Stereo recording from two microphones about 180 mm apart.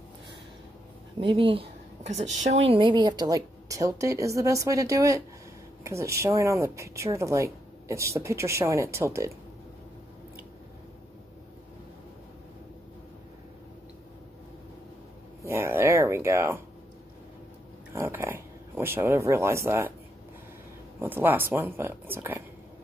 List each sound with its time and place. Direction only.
1.3 s a woman's voice: 30° right (ahead or behind)
15.4 s a sound: 15° right (ahead or behind)
17.9 s speech: 15° right (ahead or behind)
21.0 s speech: 10° right (ahead or behind)